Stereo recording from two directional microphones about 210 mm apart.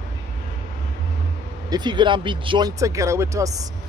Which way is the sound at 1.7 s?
20° right (ahead or behind).